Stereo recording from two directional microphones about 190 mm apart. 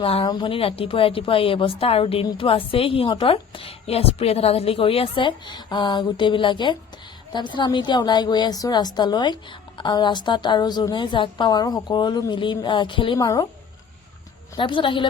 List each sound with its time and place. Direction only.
0.0 s a woman's voice: 30° left (ahead or behind)
14.5 s a woman's voice: 25° left (ahead or behind)